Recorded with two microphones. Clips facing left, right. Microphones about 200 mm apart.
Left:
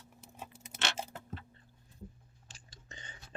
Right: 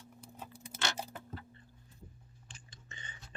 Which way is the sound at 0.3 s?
25° left (ahead or behind).